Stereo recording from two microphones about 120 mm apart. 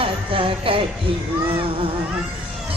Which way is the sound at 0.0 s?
50° right (ahead or behind).